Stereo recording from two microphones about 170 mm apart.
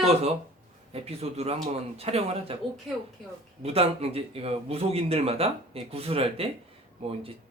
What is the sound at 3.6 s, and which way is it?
A man's voice, 35° right (ahead or behind).